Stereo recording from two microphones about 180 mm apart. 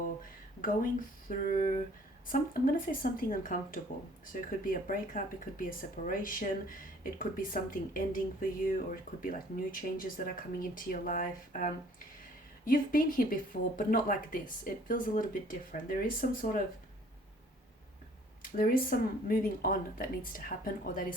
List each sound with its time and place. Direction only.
1.5 s speech: 50° left (ahead or behind)
18.5 s speech: 50° left (ahead or behind)